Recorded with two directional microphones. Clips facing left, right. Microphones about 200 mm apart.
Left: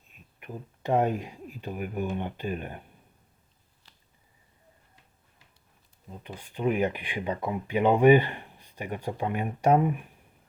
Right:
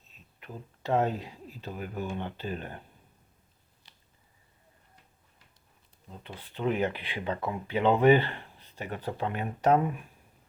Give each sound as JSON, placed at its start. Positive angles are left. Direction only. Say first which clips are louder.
{"t": 0.3, "sound": "speech", "louder": "left 3 dB", "side_deg": 15}
{"t": 6.1, "sound": "speech", "louder": "left 3 dB", "side_deg": 15}